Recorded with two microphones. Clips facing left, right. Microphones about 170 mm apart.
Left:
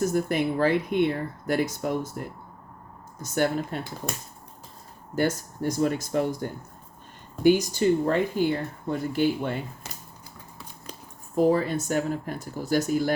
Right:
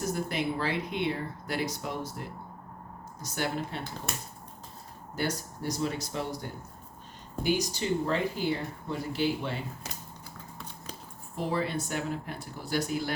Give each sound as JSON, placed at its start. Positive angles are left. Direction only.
{"t": 0.1, "sound": "speech", "side_deg": 50}
{"t": 5.1, "sound": "speech", "side_deg": 50}
{"t": 11.3, "sound": "speech", "side_deg": 45}